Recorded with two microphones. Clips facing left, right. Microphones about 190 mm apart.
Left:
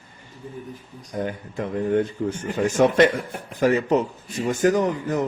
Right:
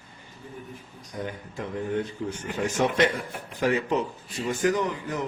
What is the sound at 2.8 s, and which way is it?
A man's voice, 50° left (ahead or behind).